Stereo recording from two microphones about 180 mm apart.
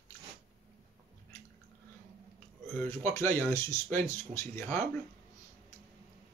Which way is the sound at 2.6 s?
10° left (ahead or behind).